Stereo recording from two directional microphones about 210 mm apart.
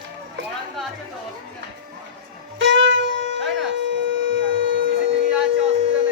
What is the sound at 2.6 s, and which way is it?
Shofar, 65° right (ahead or behind).